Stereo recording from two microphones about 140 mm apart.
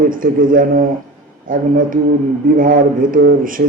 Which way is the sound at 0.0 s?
80° right.